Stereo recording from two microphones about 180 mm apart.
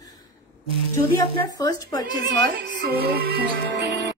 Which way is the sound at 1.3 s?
20° left (ahead or behind).